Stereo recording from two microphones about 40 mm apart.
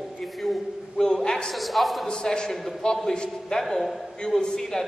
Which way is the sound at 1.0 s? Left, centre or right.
Centre.